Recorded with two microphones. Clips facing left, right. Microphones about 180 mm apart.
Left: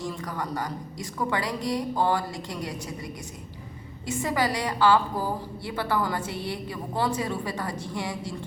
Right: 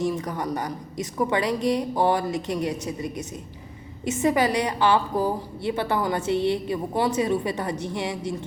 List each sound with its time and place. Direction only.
0.0 s a woman's voice: 20° right (ahead or behind)